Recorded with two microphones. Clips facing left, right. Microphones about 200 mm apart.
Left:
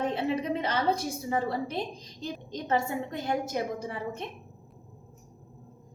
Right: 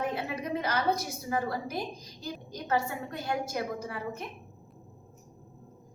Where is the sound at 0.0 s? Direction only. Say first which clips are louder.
Left 4 dB; 25° left (ahead or behind).